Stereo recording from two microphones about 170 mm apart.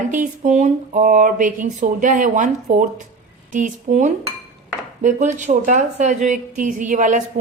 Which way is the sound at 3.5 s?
50° right (ahead or behind).